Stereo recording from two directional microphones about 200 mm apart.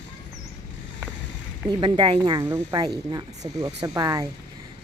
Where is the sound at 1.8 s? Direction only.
25° right (ahead or behind).